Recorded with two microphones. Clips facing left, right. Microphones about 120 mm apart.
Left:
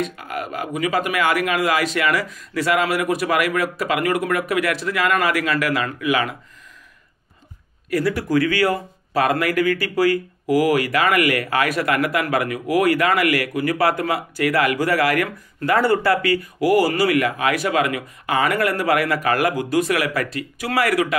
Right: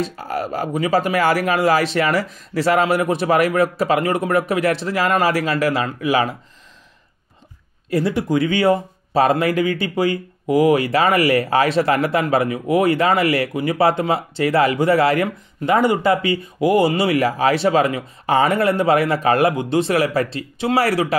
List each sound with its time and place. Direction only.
0.0 s speech: 35° right (ahead or behind)
7.9 s speech: 25° right (ahead or behind)